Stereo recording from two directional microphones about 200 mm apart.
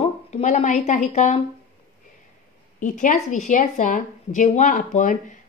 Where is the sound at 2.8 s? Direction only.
40° left (ahead or behind).